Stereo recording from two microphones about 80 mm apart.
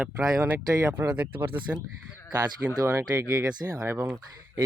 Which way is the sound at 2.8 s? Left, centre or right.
Right.